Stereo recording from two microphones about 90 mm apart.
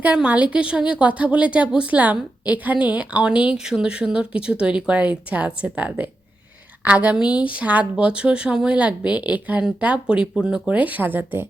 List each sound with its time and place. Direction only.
0.0 s speech: 15° right (ahead or behind)